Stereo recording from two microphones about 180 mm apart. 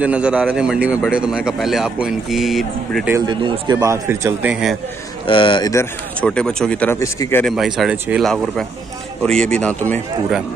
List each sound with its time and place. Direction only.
0.0 s speech: 5° right (ahead or behind)
3.2 s a man's voice: 25° right (ahead or behind); by 4.7 s 5° right (ahead or behind)
5.2 s speech: 30° left (ahead or behind)
6.2 s speech: 5° left (ahead or behind)
7.4 s speech: centre (ahead or behind)